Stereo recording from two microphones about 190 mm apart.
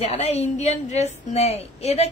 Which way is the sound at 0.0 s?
35° left (ahead or behind).